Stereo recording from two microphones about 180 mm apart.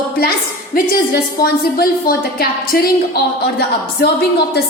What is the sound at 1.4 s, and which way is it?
A woman's voice, 55° left (ahead or behind).